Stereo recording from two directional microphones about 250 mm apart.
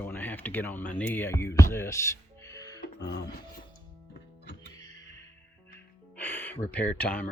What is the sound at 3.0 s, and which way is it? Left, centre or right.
Speech, left.